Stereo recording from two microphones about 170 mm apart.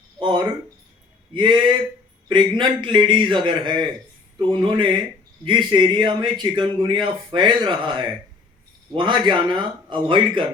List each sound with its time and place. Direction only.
0.2 s a man's voice: 25° right (ahead or behind)